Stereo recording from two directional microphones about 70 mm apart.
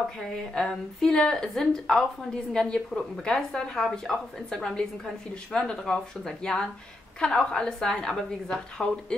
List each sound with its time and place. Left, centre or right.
0.2 s speech: centre